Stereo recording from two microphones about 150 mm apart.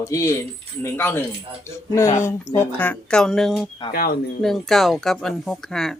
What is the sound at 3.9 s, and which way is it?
Speech, 90° left.